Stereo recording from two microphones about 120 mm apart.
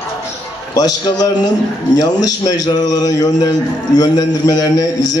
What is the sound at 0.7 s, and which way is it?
A man's voice, 35° left (ahead or behind).